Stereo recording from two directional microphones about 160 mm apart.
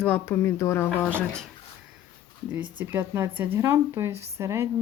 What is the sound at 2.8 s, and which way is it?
A woman's voice, 15° right (ahead or behind).